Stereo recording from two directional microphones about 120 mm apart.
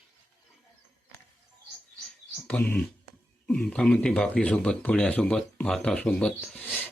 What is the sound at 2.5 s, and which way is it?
Speech, 10° left (ahead or behind).